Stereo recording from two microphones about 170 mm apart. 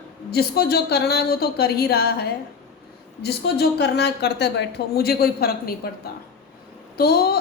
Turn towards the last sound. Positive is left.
turn(degrees=65)  # may be behind; listen again after turning